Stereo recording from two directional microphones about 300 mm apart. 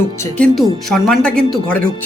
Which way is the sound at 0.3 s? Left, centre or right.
Centre.